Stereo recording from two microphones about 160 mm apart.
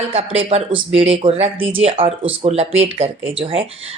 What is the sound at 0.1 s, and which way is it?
A woman's voice, 35° right (ahead or behind).